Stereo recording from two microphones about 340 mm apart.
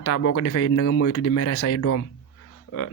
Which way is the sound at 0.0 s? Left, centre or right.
Left.